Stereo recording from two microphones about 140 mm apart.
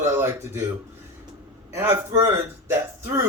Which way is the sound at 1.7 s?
15° right (ahead or behind).